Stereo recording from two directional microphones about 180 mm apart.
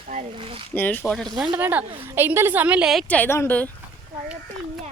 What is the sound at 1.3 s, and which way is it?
A woman's voice, 5° right (ahead or behind).